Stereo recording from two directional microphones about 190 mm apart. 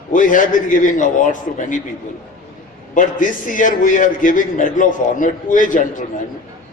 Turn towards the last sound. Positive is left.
turn(degrees=45)  # may be behind; listen again after turning